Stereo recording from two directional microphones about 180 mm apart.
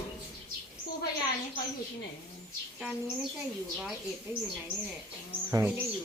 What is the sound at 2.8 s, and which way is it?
Speech, 5° right (ahead or behind).